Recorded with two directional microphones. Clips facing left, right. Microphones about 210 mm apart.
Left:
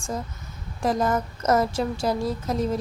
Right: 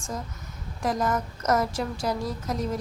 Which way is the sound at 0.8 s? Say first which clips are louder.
Left 3 dB; 30° left (ahead or behind).